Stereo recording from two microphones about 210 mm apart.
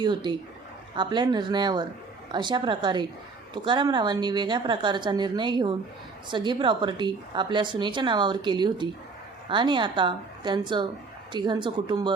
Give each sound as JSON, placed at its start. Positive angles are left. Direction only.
{"t": 0.0, "sound": "a woman's voice", "side_deg": -20}